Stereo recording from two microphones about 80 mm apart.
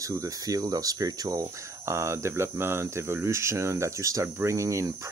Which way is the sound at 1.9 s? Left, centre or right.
Right.